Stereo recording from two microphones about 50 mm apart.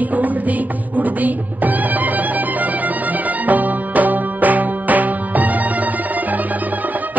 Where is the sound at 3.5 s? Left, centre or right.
Right.